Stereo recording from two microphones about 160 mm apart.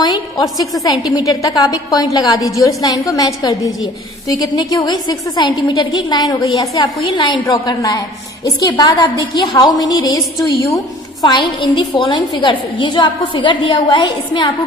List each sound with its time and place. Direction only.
0.3 s a woman's voice: centre (ahead or behind)
0.9 s a woman's voice: 25° left (ahead or behind)